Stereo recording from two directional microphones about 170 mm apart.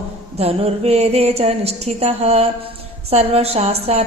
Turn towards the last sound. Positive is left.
turn(degrees=-40)  # may be behind; listen again after turning